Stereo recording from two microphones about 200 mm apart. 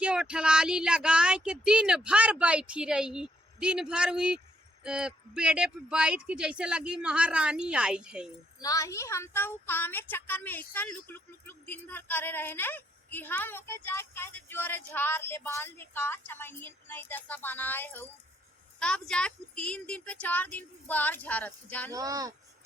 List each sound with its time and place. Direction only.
0.0 s speech: 5° right (ahead or behind)
8.6 s a woman's voice: 15° left (ahead or behind)
21.9 s speech: 20° right (ahead or behind)